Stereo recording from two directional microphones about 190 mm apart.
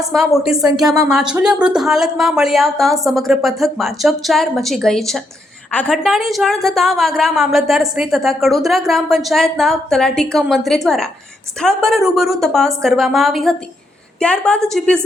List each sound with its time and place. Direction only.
0.3 s a woman's voice: centre (ahead or behind)
0.9 s speech: 20° right (ahead or behind)
1.3 s a woman's voice: 5° right (ahead or behind)